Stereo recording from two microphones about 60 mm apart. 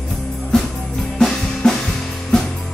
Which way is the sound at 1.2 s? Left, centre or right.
Centre.